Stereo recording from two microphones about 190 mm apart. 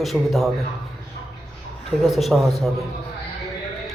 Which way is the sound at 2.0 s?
Centre (ahead or behind).